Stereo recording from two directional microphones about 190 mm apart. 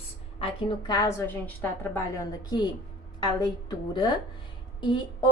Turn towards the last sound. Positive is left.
turn(degrees=25)  # may be behind; listen again after turning